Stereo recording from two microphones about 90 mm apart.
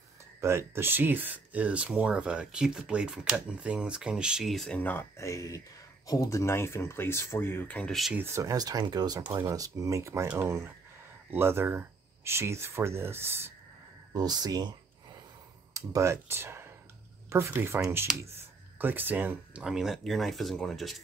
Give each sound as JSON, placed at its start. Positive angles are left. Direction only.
{"t": 0.4, "sound": "speech", "side_deg": -30}
{"t": 4.6, "sound": "speech", "side_deg": 15}
{"t": 5.1, "sound": "speech", "side_deg": 35}
{"t": 8.2, "sound": "speech", "side_deg": -35}
{"t": 14.1, "sound": "speech", "side_deg": -45}
{"t": 15.7, "sound": "speech", "side_deg": -35}
{"t": 18.1, "sound": "speech", "side_deg": -5}
{"t": 18.8, "sound": "speech", "side_deg": -20}